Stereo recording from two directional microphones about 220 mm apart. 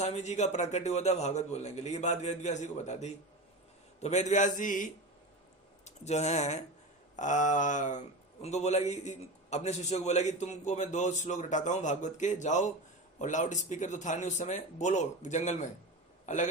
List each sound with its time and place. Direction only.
0.0 s a man's voice: 30° left (ahead or behind)